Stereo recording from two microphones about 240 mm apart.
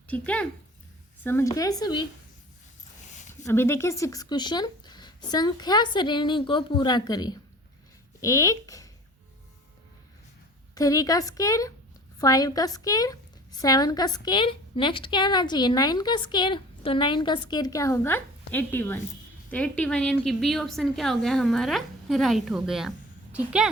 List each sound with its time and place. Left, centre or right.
0.1 s a woman's voice: centre
3.4 s a woman's voice: centre
10.8 s a woman's voice: centre